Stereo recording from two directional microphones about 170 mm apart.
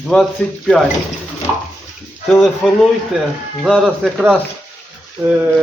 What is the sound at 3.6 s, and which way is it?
Speech, centre (ahead or behind).